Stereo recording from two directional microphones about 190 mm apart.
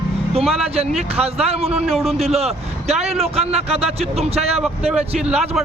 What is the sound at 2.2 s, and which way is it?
Speech, 35° right (ahead or behind).